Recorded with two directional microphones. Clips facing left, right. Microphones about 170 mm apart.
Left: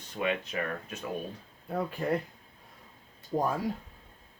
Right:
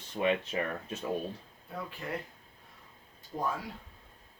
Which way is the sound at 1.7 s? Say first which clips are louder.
Left 8 dB; 45° left (ahead or behind).